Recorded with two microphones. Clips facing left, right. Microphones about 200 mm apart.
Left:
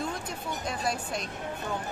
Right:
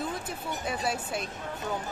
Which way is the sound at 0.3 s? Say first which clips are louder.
Right 1 dB; 5° right (ahead or behind).